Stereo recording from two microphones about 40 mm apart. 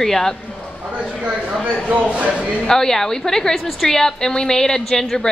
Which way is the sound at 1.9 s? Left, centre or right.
Right.